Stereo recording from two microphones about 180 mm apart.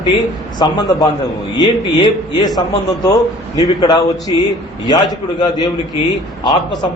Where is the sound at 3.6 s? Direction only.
20° left (ahead or behind).